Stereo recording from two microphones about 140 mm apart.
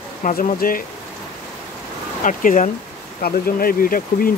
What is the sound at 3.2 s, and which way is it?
Speech, 90° left.